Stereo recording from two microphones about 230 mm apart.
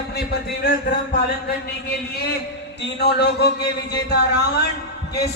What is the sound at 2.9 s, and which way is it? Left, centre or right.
Speech, left.